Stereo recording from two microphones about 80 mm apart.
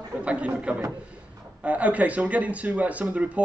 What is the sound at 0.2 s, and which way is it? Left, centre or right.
Speech, centre.